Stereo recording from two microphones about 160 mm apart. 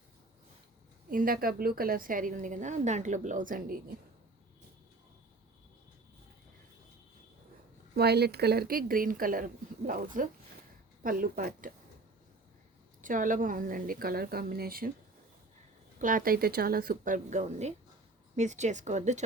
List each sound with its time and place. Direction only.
1.1 s a woman's voice: 60° right (ahead or behind)
7.9 s a woman's voice: 90° right; by 11.7 s 60° right (ahead or behind)
13.0 s a woman's voice: 55° right (ahead or behind)
16.0 s a woman's voice: 55° right (ahead or behind)